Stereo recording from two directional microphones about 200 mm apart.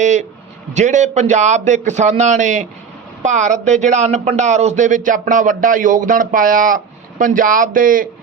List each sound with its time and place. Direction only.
0.0 s a man's voice: 35° right (ahead or behind)